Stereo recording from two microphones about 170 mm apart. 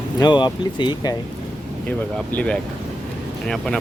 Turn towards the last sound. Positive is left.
turn(degrees=0)  # may be behind; listen again after turning